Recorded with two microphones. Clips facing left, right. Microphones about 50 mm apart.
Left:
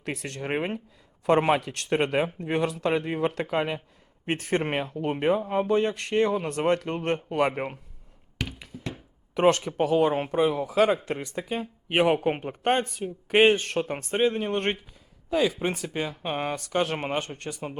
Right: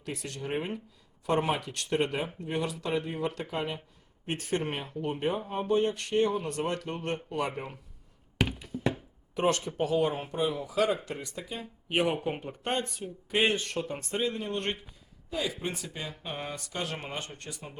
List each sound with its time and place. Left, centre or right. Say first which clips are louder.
0.0 s speech: left 4 dB; left
8.4 s tap: right 4 dB; right
9.3 s speech: left 6 dB; left
15.3 s speech: left 8 dB; left